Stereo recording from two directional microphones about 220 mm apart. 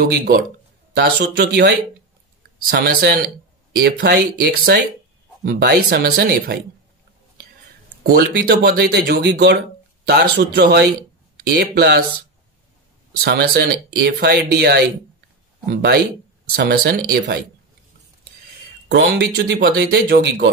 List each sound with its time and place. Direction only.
0.0 s speech: 45° right (ahead or behind)
8.0 s speech: 45° right (ahead or behind)
13.2 s speech: 45° right (ahead or behind)
18.9 s speech: 50° right (ahead or behind)